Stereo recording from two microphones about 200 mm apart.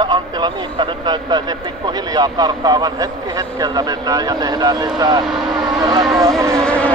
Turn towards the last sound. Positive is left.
turn(degrees=5)  # may be behind; listen again after turning